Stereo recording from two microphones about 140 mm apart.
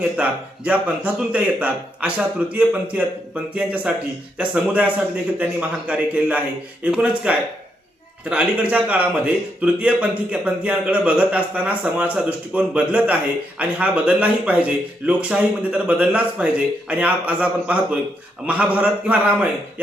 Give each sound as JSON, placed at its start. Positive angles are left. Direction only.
{"t": 0.2, "sound": "a man's voice", "side_deg": -10}